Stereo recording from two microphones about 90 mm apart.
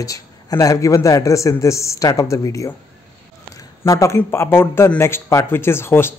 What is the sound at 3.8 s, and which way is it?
A man's voice, 35° left (ahead or behind).